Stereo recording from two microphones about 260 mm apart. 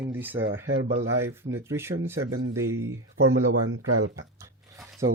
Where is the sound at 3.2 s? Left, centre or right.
Right.